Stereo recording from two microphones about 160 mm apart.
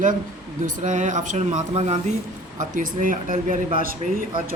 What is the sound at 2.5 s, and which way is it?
Speech, 55° right (ahead or behind).